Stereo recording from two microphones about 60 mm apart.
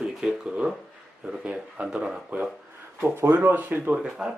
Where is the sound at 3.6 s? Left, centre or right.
Right.